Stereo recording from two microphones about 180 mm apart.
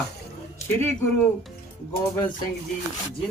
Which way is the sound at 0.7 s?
10° left (ahead or behind).